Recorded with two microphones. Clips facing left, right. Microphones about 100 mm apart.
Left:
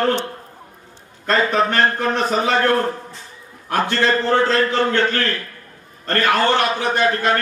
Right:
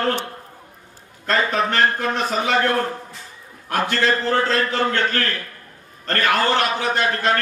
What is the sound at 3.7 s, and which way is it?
A man's voice, 25° left (ahead or behind).